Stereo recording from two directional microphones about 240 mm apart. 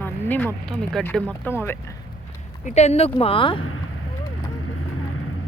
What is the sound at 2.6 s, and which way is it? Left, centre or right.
Speech, left.